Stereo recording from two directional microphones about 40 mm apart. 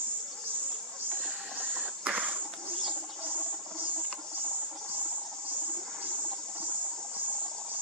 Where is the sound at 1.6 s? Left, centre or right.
Right.